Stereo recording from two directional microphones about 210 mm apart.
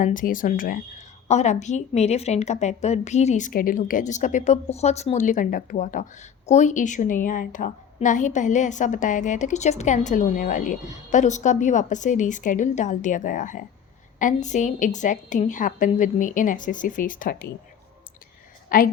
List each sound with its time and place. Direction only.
0.0 s a woman's voice: 40° left (ahead or behind)
18.7 s a woman's voice: 40° left (ahead or behind)